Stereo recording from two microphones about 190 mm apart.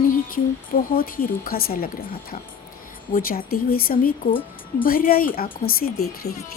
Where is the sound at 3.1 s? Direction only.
50° left (ahead or behind).